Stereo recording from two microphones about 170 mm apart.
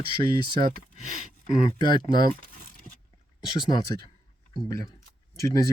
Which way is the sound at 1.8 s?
25° left (ahead or behind).